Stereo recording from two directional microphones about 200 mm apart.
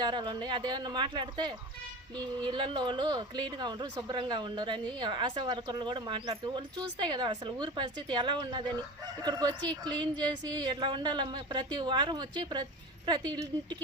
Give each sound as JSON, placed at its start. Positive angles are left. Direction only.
{"t": 0.0, "sound": "speech", "side_deg": -20}